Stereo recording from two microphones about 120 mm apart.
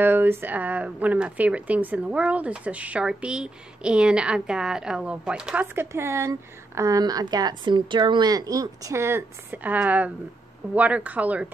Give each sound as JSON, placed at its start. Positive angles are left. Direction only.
{"t": 0.0, "sound": "speech", "side_deg": -15}
{"t": 5.8, "sound": "a woman's voice", "side_deg": -20}